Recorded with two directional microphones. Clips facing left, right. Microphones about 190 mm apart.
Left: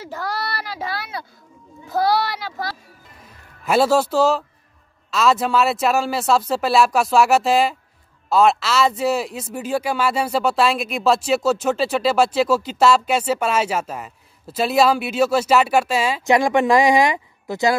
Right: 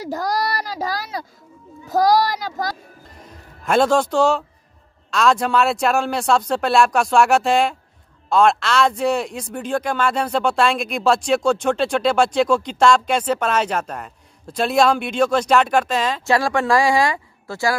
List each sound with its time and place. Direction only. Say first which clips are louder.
0.0 s child singing: right 5 dB; 40° right (ahead or behind)
3.6 s a man's voice: even; 5° left (ahead or behind)